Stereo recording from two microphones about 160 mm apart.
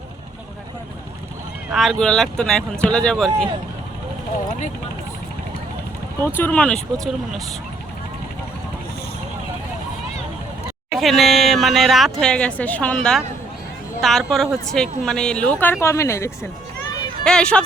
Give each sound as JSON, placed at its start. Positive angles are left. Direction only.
{"t": 1.7, "sound": "speech", "side_deg": 0}
{"t": 6.1, "sound": "a woman's voice", "side_deg": 10}
{"t": 10.9, "sound": "a woman's voice", "side_deg": 0}
{"t": 15.8, "sound": "a woman's voice", "side_deg": 15}
{"t": 17.2, "sound": "speech", "side_deg": 5}